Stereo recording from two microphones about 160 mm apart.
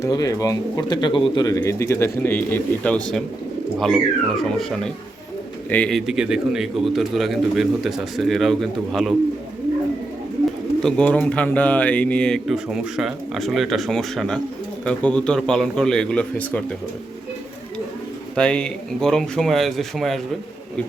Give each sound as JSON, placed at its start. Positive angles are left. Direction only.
{"t": 0.0, "sound": "speech", "side_deg": 25}
{"t": 6.1, "sound": "speech", "side_deg": -5}
{"t": 10.8, "sound": "speech", "side_deg": 5}
{"t": 18.3, "sound": "speech", "side_deg": 5}